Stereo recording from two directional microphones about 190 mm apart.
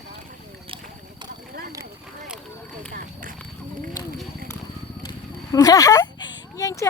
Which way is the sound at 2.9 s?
45° right (ahead or behind).